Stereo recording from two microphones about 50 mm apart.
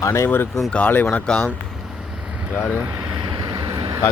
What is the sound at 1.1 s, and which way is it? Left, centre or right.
Speech, centre.